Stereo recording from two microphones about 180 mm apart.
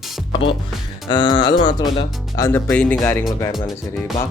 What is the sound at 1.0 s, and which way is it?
Speech, 25° left (ahead or behind).